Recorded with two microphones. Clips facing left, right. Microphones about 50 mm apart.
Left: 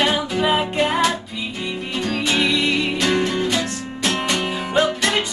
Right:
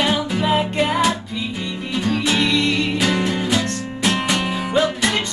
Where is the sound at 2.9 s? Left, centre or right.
Centre.